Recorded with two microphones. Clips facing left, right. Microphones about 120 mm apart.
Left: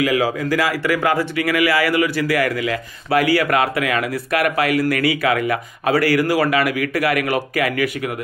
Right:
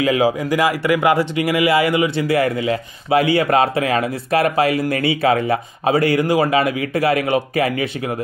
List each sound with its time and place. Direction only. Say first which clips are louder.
0.0 s speech: right 2 dB; 20° right (ahead or behind)